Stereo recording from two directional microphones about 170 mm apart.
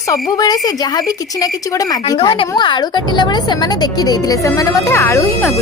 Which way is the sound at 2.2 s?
30° left (ahead or behind).